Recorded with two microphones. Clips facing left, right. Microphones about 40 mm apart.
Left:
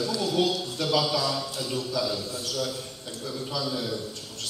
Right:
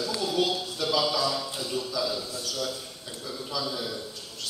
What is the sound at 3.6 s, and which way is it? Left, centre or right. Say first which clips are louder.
Speech: left 2 dB; centre.